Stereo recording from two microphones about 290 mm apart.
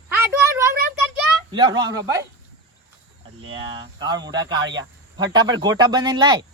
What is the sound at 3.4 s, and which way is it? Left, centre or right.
Speech, centre.